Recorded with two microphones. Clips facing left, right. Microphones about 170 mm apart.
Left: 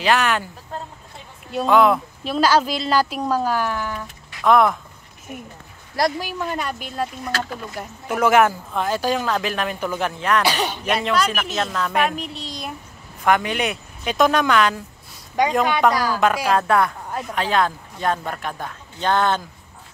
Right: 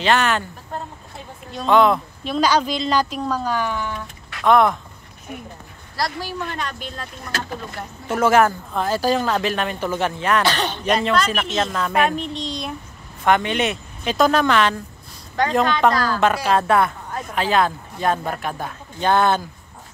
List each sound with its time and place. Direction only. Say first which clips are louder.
0.0 s speech: right 1 dB; centre (ahead or behind)
1.5 s speech: even; 5° left (ahead or behind)
5.9 s speech: left 4 dB; 15° left (ahead or behind); by 10.4 s centre (ahead or behind)
10.4 s speech: right 1 dB; 10° left (ahead or behind)
16.5 s speech: right 1 dB; centre (ahead or behind)